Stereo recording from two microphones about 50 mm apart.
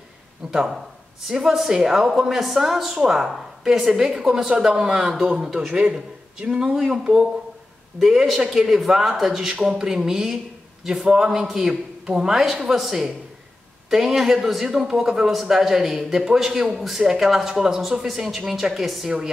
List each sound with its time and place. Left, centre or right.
0.5 s a man's voice: centre